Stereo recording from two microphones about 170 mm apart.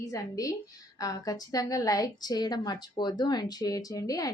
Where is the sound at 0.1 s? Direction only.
20° left (ahead or behind).